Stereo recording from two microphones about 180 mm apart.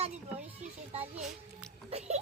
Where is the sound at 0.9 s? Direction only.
35° right (ahead or behind).